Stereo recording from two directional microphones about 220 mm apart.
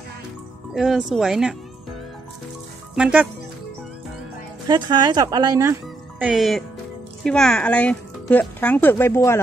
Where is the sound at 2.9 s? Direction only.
5° right (ahead or behind).